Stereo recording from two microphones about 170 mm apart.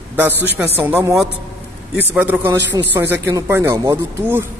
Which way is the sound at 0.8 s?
10° right (ahead or behind).